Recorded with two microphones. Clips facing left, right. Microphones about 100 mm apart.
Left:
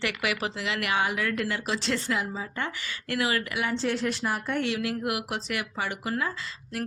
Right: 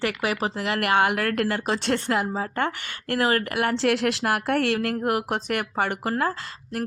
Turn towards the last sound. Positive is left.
turn(degrees=-50)  # may be behind; listen again after turning